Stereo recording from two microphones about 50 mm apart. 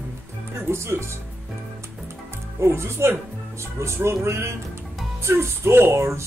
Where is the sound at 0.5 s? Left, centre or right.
Right.